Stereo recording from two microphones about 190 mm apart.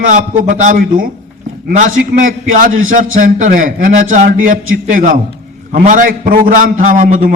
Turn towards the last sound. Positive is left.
turn(degrees=-45)  # may be behind; listen again after turning